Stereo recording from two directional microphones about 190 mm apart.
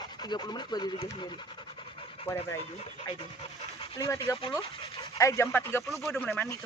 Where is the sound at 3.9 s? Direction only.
15° left (ahead or behind).